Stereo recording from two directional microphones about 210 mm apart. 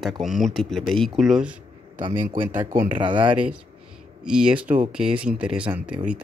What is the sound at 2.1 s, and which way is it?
Speech, 40° right (ahead or behind).